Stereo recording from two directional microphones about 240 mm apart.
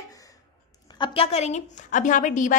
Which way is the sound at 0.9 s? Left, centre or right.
Left.